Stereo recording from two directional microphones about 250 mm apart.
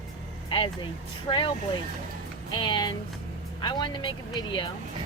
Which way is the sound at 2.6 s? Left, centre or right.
Centre.